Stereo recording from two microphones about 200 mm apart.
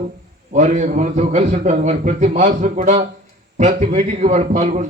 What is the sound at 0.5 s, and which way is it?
A man's voice, 35° right (ahead or behind).